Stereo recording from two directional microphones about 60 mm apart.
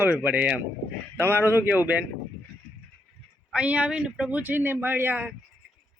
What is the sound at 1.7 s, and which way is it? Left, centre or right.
Speech, right.